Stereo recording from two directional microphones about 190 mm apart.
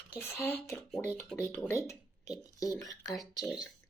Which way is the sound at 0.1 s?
10° left (ahead or behind).